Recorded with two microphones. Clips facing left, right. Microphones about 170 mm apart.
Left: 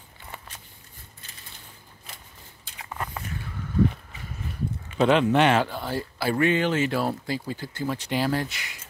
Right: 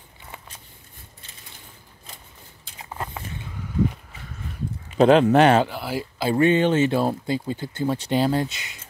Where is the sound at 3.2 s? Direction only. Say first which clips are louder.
Even; 20° right (ahead or behind).